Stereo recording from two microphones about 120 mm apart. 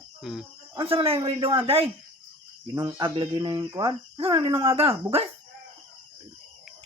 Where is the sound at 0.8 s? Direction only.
45° right (ahead or behind).